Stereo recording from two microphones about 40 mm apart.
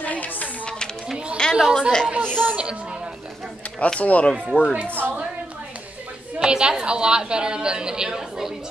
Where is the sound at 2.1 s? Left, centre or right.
Right.